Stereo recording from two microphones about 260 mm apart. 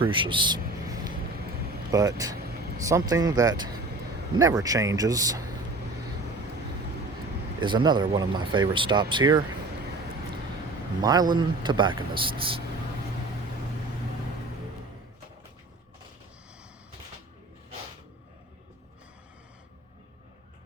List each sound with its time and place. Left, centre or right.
0.0 s music: centre
1.9 s speech: centre
7.6 s speech: centre
11.0 s speech: centre